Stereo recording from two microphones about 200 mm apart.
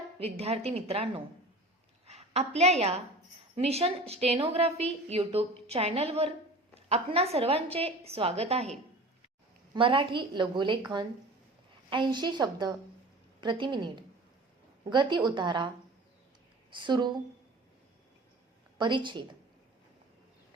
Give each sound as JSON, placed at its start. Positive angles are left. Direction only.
{"t": 0.2, "sound": "a woman's voice", "side_deg": -30}
{"t": 16.7, "sound": "a woman's voice", "side_deg": -25}
{"t": 18.8, "sound": "a woman's voice", "side_deg": -25}